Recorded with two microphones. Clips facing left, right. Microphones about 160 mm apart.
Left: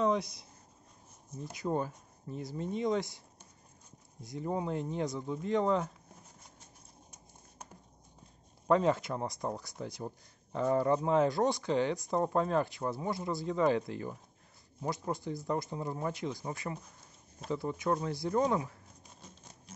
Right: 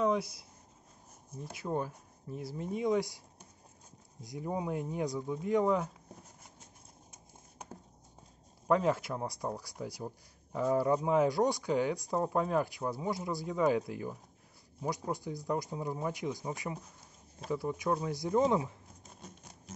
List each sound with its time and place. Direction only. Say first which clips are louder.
0.0 s a sound: even; 5° right (ahead or behind)
1.4 s speech: left 2 dB; 5° right (ahead or behind)
4.2 s speech: left 1 dB; 10° right (ahead or behind)
8.6 s speech: left 1 dB; 5° right (ahead or behind); by 18.8 s 20° right (ahead or behind)